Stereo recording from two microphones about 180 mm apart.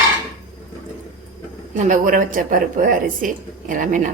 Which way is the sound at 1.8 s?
45° right (ahead or behind).